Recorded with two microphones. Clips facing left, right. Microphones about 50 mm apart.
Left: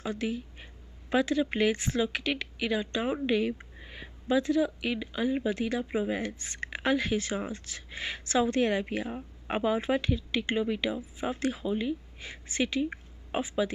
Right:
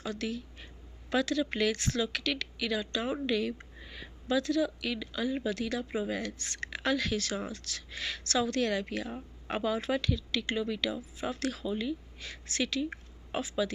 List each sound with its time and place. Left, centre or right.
0.0 s a woman's voice: left